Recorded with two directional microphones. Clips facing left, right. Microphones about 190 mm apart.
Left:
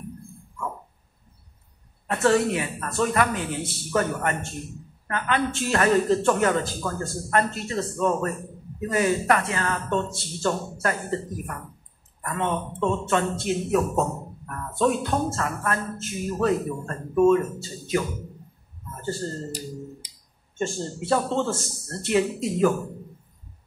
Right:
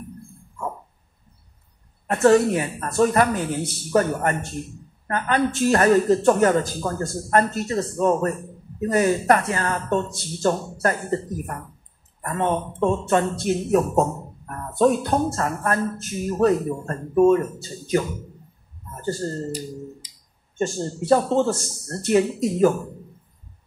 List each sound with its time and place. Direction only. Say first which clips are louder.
2.0 s speech: right 5 dB; 40° right (ahead or behind)
12.2 s speech: right 4 dB; 40° right (ahead or behind)
20.5 s speech: right 3 dB; 40° right (ahead or behind)